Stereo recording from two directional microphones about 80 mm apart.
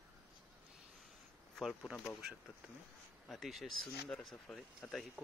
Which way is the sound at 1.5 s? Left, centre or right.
Centre.